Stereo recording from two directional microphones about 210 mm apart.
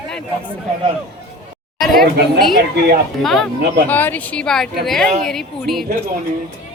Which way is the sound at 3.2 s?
Centre (ahead or behind).